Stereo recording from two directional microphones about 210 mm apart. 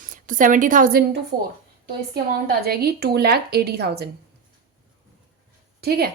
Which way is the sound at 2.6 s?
45° right (ahead or behind).